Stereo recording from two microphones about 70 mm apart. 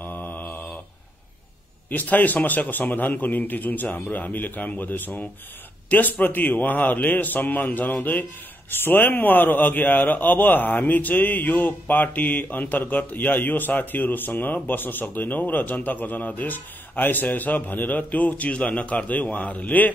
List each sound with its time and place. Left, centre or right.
0.0 s mantra: left
1.9 s a man's voice: left